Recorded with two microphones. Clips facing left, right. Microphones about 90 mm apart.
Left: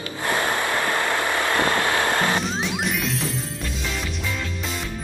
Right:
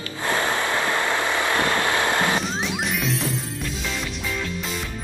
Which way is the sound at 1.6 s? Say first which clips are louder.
Left 1 dB; 15° left (ahead or behind).